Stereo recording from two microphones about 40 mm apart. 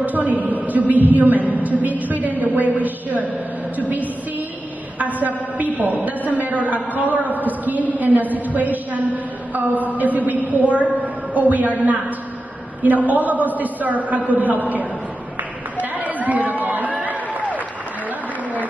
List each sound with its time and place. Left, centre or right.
0.0 s a woman's voice: right
4.9 s a man's voice: right
15.8 s chatter: right